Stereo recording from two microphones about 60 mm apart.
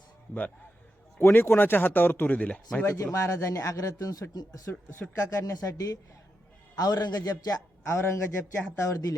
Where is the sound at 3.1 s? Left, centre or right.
Left.